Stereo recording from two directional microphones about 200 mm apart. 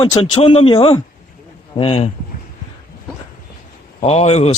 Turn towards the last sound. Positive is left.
turn(degrees=35)  # may be behind; listen again after turning